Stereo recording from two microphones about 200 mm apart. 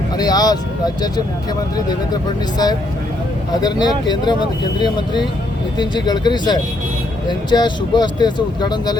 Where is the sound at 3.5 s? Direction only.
20° left (ahead or behind).